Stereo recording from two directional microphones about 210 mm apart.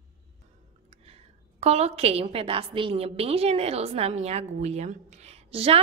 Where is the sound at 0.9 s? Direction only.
30° right (ahead or behind).